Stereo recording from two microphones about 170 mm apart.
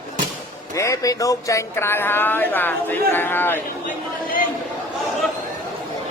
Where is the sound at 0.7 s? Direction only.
20° left (ahead or behind).